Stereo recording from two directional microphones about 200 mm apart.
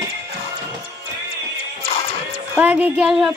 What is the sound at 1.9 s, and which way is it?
Music, 30° left (ahead or behind).